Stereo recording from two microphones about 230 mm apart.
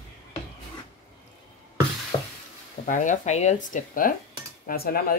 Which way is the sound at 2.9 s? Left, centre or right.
Left.